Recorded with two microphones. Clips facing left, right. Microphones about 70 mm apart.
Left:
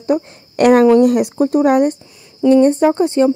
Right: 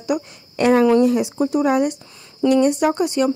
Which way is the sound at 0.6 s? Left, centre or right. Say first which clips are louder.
Left 5 dB; left.